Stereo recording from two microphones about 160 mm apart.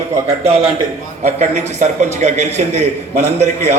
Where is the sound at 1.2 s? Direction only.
45° right (ahead or behind).